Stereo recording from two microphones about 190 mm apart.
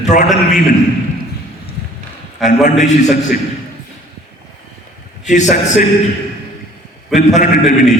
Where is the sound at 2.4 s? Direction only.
40° left (ahead or behind).